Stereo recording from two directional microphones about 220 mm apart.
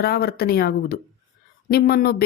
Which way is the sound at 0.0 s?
45° left (ahead or behind).